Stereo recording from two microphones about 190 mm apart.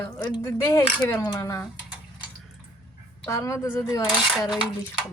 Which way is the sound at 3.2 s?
15° left (ahead or behind).